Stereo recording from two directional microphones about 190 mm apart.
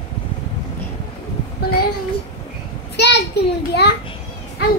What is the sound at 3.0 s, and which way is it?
Speech, 60° left (ahead or behind).